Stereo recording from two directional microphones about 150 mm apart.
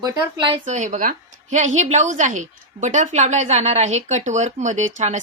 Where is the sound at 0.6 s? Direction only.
50° right (ahead or behind).